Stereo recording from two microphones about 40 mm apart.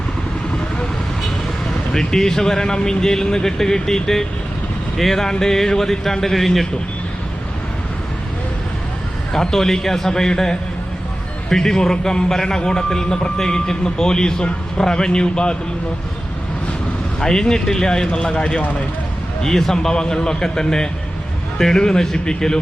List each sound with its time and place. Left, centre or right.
1.9 s speech: centre
9.3 s speech: centre
17.2 s speech: centre
18.3 s speech: left
19.4 s speech: centre